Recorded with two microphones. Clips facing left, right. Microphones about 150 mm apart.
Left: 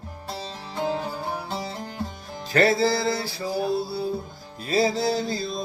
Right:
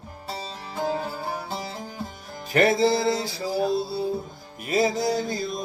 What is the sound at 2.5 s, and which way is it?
Music, 20° right (ahead or behind).